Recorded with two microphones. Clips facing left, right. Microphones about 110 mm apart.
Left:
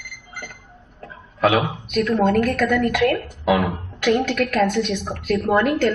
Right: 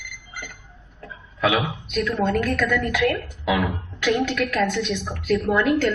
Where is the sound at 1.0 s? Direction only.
45° left (ahead or behind).